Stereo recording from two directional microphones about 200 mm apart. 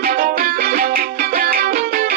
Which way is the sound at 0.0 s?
45° right (ahead or behind).